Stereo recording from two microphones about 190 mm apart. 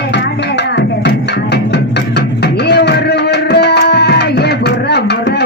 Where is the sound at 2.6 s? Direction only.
60° left (ahead or behind).